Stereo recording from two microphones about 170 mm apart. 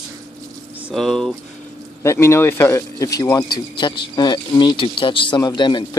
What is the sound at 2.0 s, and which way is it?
Speech, 15° left (ahead or behind).